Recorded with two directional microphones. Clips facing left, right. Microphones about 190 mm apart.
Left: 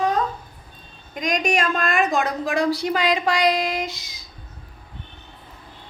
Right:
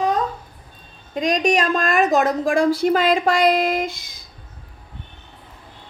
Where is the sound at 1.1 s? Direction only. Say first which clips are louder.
Right 4 dB; 35° right (ahead or behind); by 4.2 s 55° right (ahead or behind).